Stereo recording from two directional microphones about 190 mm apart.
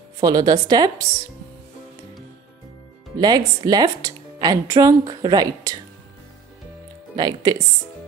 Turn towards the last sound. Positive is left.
turn(degrees=-20)  # may be behind; listen again after turning